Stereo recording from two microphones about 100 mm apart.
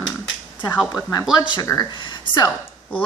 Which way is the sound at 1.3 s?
45° left (ahead or behind).